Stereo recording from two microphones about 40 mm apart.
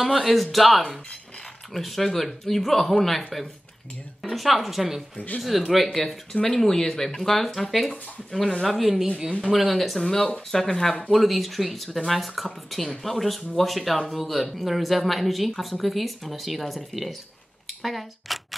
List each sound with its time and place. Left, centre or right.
0.0 s speech: centre
6.3 s speech: centre
7.2 s speech: centre
11.1 s speech: centre